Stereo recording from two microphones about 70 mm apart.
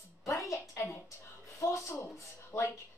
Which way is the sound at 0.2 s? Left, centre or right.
Left.